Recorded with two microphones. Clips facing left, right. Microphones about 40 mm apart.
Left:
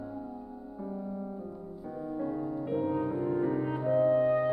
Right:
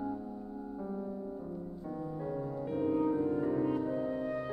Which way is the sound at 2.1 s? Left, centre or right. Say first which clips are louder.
Left 6 dB; centre.